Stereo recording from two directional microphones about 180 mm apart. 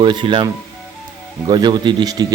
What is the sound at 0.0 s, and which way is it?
Speech, 25° right (ahead or behind).